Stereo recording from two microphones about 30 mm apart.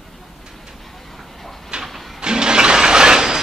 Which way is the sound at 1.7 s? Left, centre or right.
Right.